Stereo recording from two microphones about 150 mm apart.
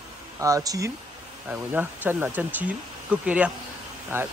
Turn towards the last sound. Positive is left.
turn(degrees=-15)  # may be behind; listen again after turning